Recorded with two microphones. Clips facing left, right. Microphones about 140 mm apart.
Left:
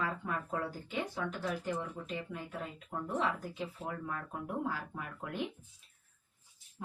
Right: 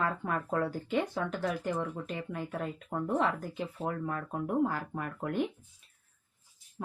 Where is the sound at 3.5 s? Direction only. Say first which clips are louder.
Right 5 dB; 50° right (ahead or behind).